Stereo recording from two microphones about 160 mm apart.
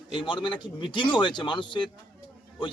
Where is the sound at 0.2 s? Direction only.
30° left (ahead or behind).